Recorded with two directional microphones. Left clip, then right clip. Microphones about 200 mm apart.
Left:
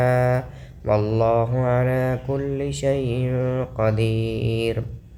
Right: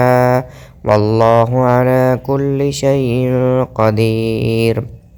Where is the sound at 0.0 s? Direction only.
40° right (ahead or behind).